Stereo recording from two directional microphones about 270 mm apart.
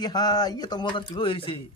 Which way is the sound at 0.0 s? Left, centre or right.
Centre.